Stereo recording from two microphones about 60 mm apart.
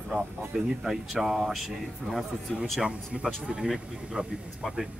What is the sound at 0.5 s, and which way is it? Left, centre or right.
Speech, centre.